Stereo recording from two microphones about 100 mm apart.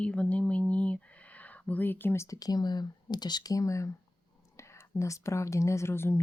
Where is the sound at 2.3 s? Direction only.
40° left (ahead or behind).